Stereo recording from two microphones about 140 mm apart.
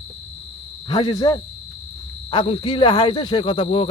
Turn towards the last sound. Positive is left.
turn(degrees=40)  # may be behind; listen again after turning